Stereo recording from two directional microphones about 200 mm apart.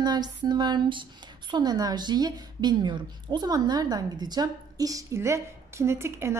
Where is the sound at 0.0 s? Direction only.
20° right (ahead or behind).